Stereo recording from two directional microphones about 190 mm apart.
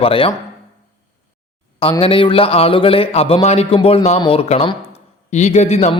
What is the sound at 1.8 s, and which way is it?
Speech, 30° left (ahead or behind).